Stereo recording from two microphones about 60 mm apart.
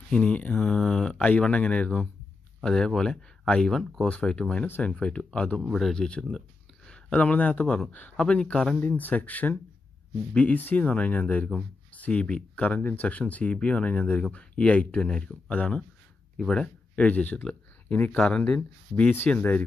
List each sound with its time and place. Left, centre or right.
0.1 s speech: left
2.6 s speech: centre
5.7 s speech: centre
5.9 s speech: centre
7.1 s speech: left
8.7 s speech: left
16.3 s speech: centre
18.1 s speech: centre